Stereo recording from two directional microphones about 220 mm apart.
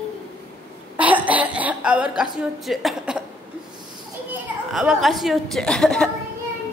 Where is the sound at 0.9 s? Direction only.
5° right (ahead or behind).